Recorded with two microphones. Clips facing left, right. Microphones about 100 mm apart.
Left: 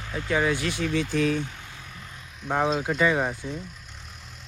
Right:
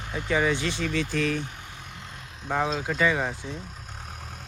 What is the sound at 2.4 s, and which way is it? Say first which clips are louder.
Speech: left 1 dB; 30° right (ahead or behind).